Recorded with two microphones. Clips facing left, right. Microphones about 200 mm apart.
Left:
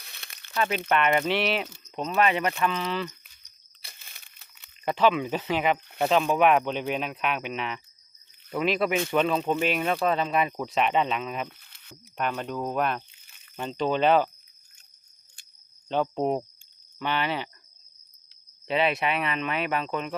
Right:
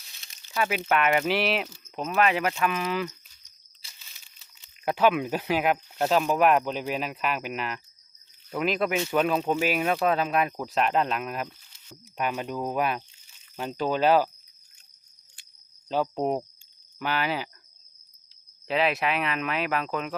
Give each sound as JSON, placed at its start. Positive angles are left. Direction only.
{"t": 0.0, "sound": "a sound", "side_deg": 60}
{"t": 0.5, "sound": "speech", "side_deg": -5}
{"t": 3.8, "sound": "crumpling", "side_deg": 55}
{"t": 4.9, "sound": "speech", "side_deg": -10}
{"t": 11.4, "sound": "a sound", "side_deg": 60}
{"t": 12.1, "sound": "speech", "side_deg": -10}
{"t": 15.9, "sound": "speech", "side_deg": -5}
{"t": 18.7, "sound": "speech", "side_deg": 0}